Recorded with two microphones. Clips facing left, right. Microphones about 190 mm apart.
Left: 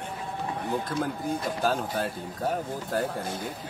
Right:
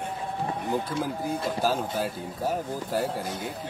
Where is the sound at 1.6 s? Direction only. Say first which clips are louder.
Even; 5° right (ahead or behind).